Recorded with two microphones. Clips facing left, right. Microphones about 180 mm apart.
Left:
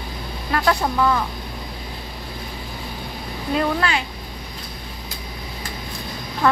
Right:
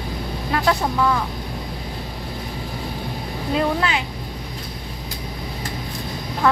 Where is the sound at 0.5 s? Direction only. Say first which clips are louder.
Even; 5° right (ahead or behind).